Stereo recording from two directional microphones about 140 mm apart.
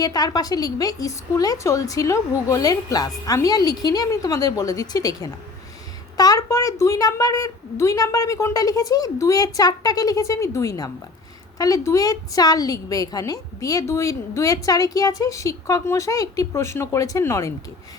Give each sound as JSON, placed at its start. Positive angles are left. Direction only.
{"t": 0.0, "sound": "a woman's voice", "side_deg": 25}